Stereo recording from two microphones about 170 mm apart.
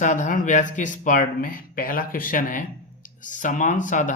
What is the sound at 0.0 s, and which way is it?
Speech, 50° left (ahead or behind).